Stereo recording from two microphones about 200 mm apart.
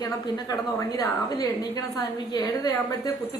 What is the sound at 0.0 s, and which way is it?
A woman's voice, 15° left (ahead or behind).